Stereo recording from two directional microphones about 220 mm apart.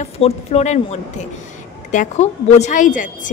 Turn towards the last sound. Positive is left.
turn(degrees=35)  # may be behind; listen again after turning